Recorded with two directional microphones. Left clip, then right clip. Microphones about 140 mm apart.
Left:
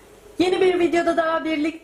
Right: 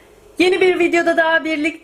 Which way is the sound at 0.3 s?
35° right (ahead or behind).